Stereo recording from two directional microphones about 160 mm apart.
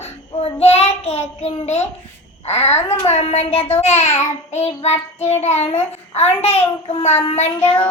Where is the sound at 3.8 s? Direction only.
45° left (ahead or behind).